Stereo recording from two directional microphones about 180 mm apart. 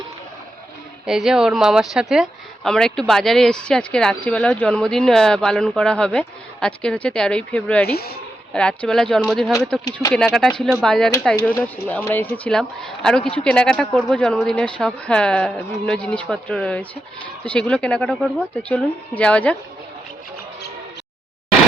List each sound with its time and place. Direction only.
1.0 s speech: 5° right (ahead or behind)
7.9 s speech: 60° left (ahead or behind)
8.5 s a woman's voice: 5° left (ahead or behind)